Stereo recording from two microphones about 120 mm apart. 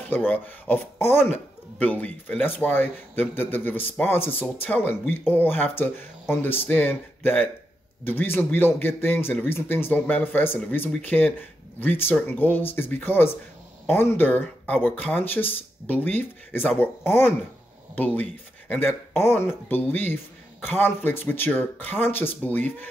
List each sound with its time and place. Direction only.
0.1 s speech: 15° left (ahead or behind)